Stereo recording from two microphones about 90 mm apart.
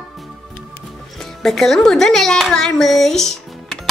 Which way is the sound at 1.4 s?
5° left (ahead or behind).